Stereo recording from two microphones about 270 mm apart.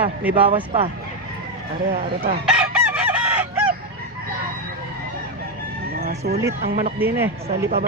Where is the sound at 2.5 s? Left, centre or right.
Centre.